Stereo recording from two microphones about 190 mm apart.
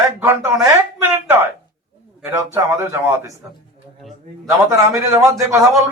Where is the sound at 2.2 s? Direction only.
10° right (ahead or behind).